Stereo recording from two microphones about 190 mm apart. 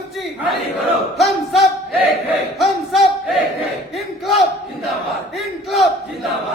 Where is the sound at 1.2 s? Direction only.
Centre (ahead or behind).